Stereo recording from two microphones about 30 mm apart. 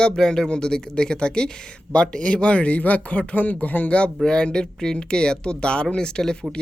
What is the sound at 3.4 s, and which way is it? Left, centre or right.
Speech, left.